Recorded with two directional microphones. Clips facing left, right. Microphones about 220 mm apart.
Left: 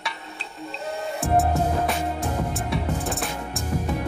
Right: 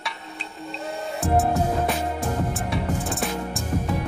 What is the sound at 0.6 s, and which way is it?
Music, centre (ahead or behind).